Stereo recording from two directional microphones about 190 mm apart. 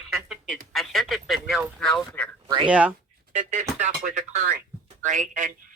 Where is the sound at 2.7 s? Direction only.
5° right (ahead or behind).